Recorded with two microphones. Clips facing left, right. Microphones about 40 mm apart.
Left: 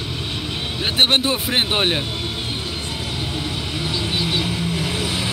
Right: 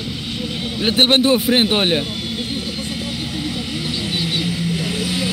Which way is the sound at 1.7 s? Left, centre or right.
Centre.